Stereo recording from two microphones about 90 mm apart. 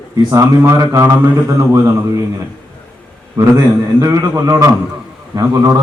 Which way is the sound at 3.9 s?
40° right (ahead or behind).